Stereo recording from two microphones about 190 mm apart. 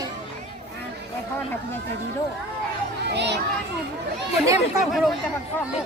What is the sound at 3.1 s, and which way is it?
Speech, 65° right (ahead or behind).